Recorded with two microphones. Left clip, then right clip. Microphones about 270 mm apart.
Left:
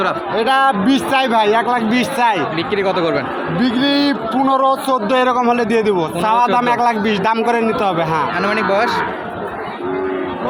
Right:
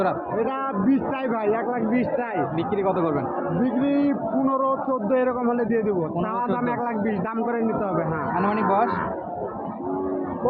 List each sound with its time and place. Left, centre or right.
0.3 s speech: left
2.7 s speech: centre
3.6 s speech: left
8.4 s speech: centre